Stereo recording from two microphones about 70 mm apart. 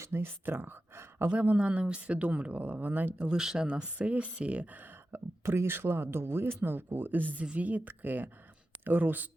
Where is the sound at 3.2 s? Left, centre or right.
Centre.